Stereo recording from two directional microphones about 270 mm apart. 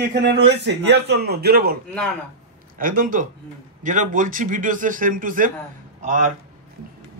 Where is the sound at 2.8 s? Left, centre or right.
Right.